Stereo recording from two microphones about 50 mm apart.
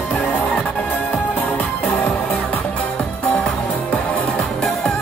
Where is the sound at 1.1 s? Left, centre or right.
Left.